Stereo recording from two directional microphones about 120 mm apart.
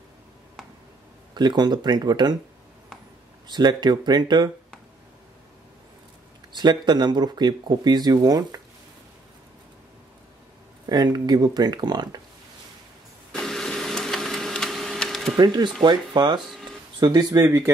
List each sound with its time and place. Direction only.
1.3 s speech: 40° right (ahead or behind)
3.4 s speech: 40° right (ahead or behind)
6.5 s speech: 35° right (ahead or behind)
10.9 s speech: 35° right (ahead or behind)
13.3 s printer: 5° left (ahead or behind)
15.3 s speech: 35° right (ahead or behind)